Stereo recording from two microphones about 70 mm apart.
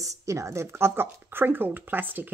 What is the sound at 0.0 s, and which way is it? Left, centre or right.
Speech, right.